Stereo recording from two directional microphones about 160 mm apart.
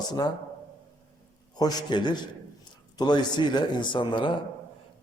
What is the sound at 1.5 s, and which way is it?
A man's voice, 25° left (ahead or behind).